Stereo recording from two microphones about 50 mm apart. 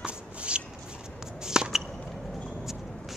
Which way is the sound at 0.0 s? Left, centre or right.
Right.